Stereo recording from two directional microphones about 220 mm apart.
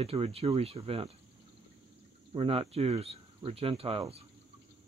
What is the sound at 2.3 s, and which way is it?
Speech, 25° right (ahead or behind).